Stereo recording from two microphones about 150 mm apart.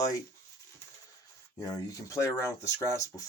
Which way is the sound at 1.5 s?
20° left (ahead or behind).